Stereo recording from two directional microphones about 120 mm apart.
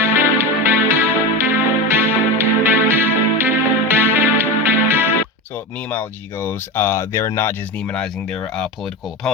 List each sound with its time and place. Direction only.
0.0 s music: 20° right (ahead or behind)
5.9 s speech: 15° left (ahead or behind)
7.9 s speech: 5° left (ahead or behind)